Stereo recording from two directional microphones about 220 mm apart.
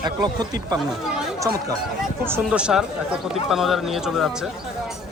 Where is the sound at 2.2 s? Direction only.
10° right (ahead or behind).